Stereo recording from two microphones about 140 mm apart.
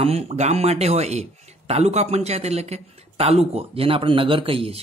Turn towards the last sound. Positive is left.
turn(degrees=-40)  # may be behind; listen again after turning